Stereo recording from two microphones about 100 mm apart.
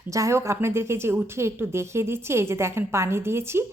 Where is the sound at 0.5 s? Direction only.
25° right (ahead or behind).